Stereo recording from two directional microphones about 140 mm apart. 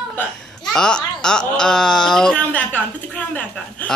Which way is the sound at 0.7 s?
5° left (ahead or behind).